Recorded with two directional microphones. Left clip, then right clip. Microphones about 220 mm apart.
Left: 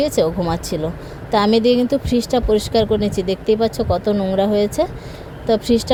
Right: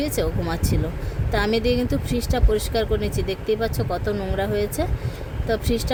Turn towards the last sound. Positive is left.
turn(degrees=15)  # may be behind; listen again after turning